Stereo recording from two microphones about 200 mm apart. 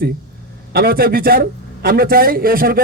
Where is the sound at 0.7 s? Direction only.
50° right (ahead or behind).